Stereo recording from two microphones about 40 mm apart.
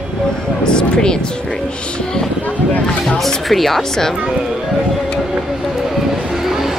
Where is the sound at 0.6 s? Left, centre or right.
Centre.